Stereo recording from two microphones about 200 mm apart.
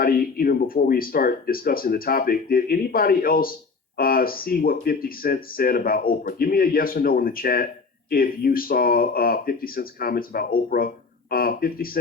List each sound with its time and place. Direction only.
0.0 s speech: 45° left (ahead or behind)